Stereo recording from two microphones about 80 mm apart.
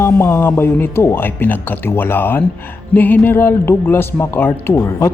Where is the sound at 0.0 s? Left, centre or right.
Left.